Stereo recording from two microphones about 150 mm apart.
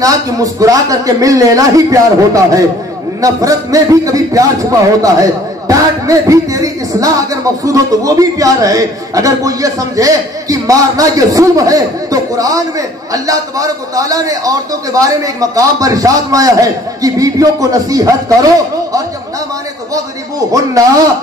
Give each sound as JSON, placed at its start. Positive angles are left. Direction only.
{"t": 0.0, "sound": "a man's voice", "side_deg": -25}
{"t": 3.2, "sound": "a man's voice", "side_deg": -25}
{"t": 19.9, "sound": "a man's voice", "side_deg": -25}